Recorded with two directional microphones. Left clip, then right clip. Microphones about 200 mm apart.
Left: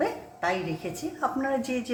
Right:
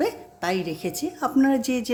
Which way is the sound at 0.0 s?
60° right (ahead or behind).